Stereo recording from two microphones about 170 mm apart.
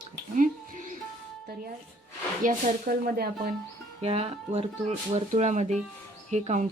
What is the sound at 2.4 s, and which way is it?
Speech, 55° right (ahead or behind).